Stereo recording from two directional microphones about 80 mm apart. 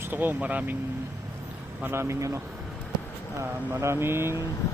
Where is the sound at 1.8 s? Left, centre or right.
Right.